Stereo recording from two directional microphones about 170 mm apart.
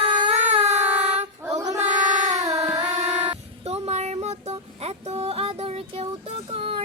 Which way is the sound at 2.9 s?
45° right (ahead or behind).